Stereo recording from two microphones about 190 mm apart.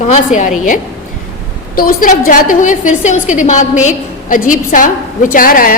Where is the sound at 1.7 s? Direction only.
50° left (ahead or behind).